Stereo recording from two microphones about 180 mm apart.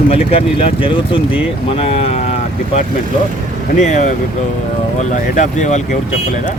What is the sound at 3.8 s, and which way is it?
Speech, 45° left (ahead or behind).